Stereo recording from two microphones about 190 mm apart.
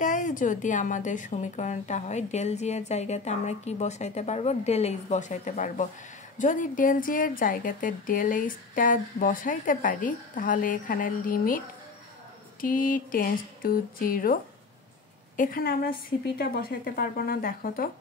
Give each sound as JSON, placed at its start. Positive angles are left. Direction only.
{"t": 0.0, "sound": "a woman's voice", "side_deg": 45}